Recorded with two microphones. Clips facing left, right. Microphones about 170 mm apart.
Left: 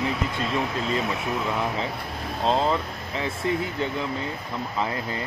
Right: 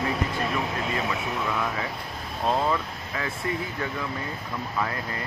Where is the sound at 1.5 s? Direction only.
25° left (ahead or behind).